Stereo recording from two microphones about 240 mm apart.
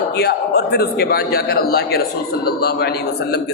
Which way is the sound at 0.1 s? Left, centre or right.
Left.